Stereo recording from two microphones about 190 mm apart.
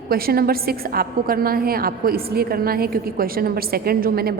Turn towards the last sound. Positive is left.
turn(degrees=-55)  # may be behind; listen again after turning